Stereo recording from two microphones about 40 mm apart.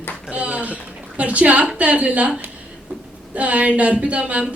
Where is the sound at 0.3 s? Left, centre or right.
Right.